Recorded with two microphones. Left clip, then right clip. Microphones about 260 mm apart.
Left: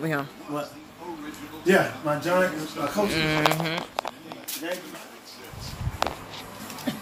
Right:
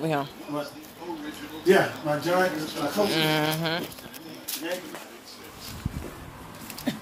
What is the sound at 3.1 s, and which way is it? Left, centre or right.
Speech, centre.